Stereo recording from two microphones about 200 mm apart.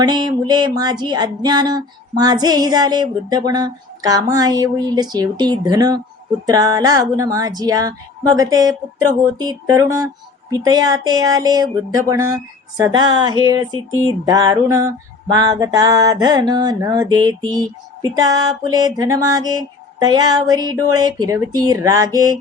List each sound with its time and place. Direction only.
0.0 s female singing: 20° right (ahead or behind)
6.4 s a woman's voice: 20° right (ahead or behind)
10.5 s female singing: 20° right (ahead or behind)